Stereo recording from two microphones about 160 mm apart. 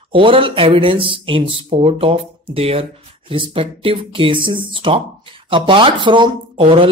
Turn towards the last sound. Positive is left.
turn(degrees=-35)  # may be behind; listen again after turning